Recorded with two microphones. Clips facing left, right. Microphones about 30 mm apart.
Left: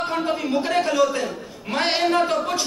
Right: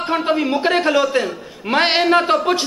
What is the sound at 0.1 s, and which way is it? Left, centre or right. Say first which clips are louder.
A man's voice: right 9 dB; right.